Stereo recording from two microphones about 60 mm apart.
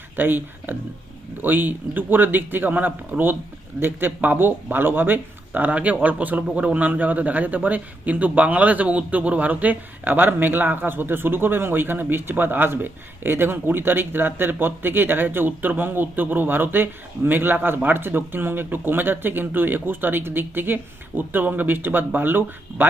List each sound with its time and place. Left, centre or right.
0.2 s a man's voice: right